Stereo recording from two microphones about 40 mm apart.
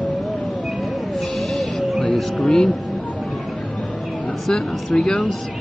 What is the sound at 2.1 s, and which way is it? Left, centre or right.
Music, centre.